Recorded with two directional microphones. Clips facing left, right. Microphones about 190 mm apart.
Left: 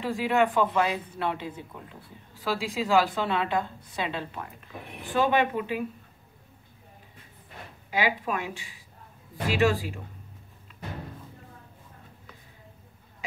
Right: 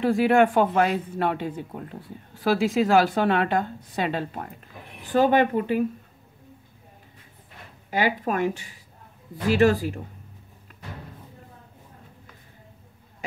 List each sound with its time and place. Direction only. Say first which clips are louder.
0.0 s speech: right 6 dB; 50° right (ahead or behind)
7.9 s speech: right 4 dB; 45° right (ahead or behind)